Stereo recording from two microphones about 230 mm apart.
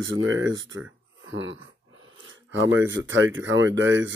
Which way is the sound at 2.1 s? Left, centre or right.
Right.